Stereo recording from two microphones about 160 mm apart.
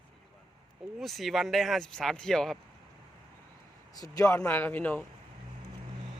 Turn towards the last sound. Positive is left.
turn(degrees=10)  # may be behind; listen again after turning